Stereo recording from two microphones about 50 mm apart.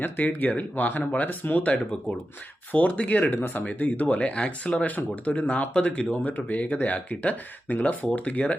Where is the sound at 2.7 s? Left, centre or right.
Left.